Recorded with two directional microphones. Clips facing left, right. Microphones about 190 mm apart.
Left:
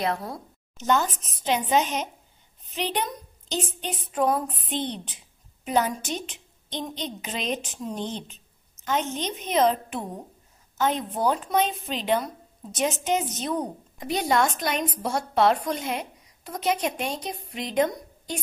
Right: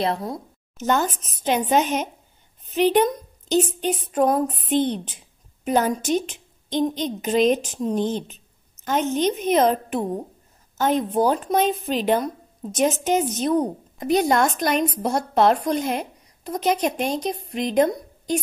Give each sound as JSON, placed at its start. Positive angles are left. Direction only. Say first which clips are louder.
{"t": 0.0, "sound": "speech", "louder": "right 4 dB", "side_deg": -25}
{"t": 0.7, "sound": "a woman's voice", "louder": "right 2 dB", "side_deg": -50}